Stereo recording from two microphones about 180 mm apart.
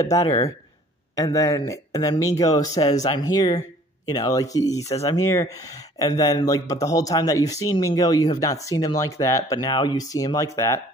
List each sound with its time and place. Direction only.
1.1 s speech: 20° left (ahead or behind)